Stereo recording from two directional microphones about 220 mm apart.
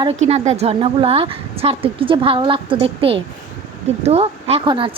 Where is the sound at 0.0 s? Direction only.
30° right (ahead or behind).